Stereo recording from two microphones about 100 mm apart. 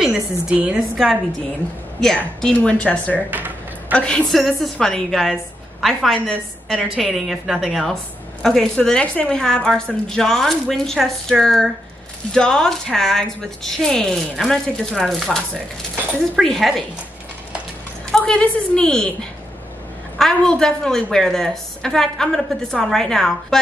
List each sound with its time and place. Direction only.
0.0 s a woman's voice: 10° right (ahead or behind)
2.0 s a woman's voice: 5° left (ahead or behind)
3.3 s speech: 20° right (ahead or behind)
3.9 s a woman's voice: 10° left (ahead or behind)
18.1 s a woman's voice: 10° left (ahead or behind)
20.2 s a woman's voice: 5° left (ahead or behind)